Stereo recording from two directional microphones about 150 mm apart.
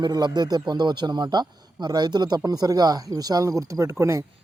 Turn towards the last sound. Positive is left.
turn(degrees=-20)  # may be behind; listen again after turning